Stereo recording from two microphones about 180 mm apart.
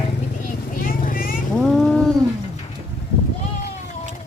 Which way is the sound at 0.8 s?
50° left (ahead or behind).